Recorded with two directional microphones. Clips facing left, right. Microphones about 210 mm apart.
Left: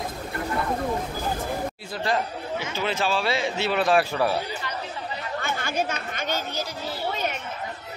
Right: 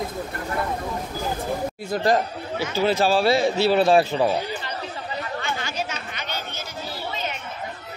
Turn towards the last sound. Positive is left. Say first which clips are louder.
# left 4 dB
turn(degrees=40)  # may be behind; listen again after turning